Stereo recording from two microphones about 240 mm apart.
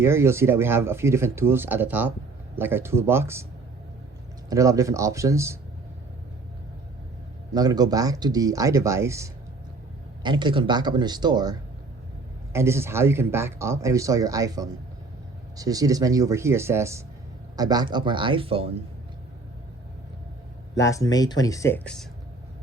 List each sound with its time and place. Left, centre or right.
0.0 s speech: centre
4.4 s speech: centre
7.5 s speech: centre
12.5 s speech: centre
20.7 s speech: centre